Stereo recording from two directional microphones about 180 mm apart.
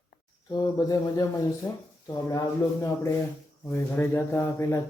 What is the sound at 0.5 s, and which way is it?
Speech, 20° left (ahead or behind).